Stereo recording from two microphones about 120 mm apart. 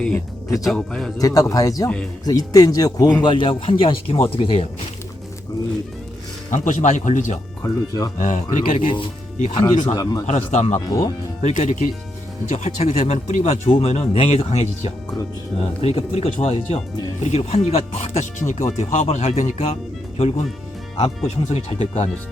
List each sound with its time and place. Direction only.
0.7 s speech: 5° left (ahead or behind)
1.2 s speech: 30° left (ahead or behind)
3.2 s speech: 45° left (ahead or behind)
6.5 s speech: 90° left
7.6 s speech: 30° left (ahead or behind)
8.2 s speech: 85° left
9.8 s speech: 35° left (ahead or behind)
10.2 s speech: 65° left (ahead or behind)
10.8 s speech: 30° left (ahead or behind)
11.4 s speech: 80° left
12.5 s speech: 65° left (ahead or behind)
13.7 s speech: 55° left (ahead or behind)